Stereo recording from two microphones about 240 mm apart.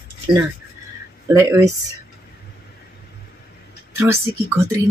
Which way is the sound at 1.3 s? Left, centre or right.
Centre.